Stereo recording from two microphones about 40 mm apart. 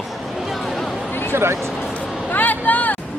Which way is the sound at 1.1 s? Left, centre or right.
Left.